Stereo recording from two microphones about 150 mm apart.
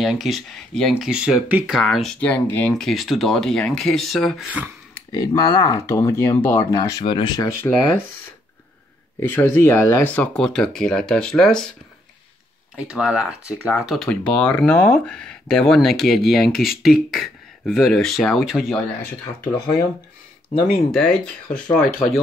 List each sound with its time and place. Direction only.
0.0 s speech: centre (ahead or behind)
2.7 s speech: centre (ahead or behind)
5.1 s speech: 25° left (ahead or behind)
6.8 s speech: 25° left (ahead or behind)
7.7 s speech: 15° left (ahead or behind)
9.2 s speech: 15° left (ahead or behind)
12.7 s speech: 5° right (ahead or behind)
20.9 s speech: 5° left (ahead or behind)
21.8 s speech: 65° left (ahead or behind)